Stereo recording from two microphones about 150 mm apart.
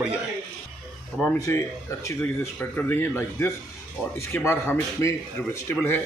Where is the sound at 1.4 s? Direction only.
20° left (ahead or behind).